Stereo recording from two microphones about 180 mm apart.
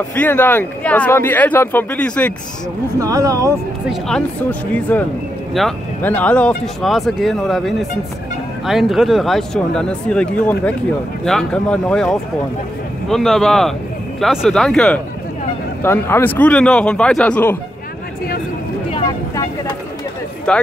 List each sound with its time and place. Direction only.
0.1 s speech: 10° left (ahead or behind)
3.0 s speech: 20° right (ahead or behind)
3.9 s speech: 5° left (ahead or behind)
18.9 s vehicle: 30° left (ahead or behind)
20.5 s speech: 5° left (ahead or behind)